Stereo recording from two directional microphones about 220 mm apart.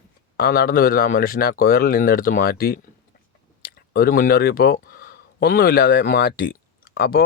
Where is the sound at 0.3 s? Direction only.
45° left (ahead or behind).